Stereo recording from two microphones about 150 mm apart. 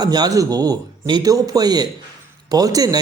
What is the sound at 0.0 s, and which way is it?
A man's voice, 25° right (ahead or behind).